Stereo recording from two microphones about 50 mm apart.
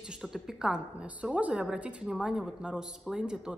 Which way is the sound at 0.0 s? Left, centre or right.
Centre.